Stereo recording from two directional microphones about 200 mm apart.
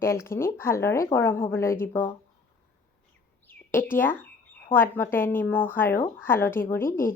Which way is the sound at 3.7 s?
10° left (ahead or behind).